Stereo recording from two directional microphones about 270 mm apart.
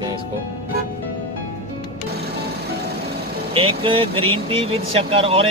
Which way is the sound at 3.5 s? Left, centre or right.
Centre.